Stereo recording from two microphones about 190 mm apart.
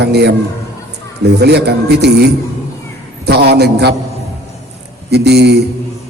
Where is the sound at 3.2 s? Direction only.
60° right (ahead or behind).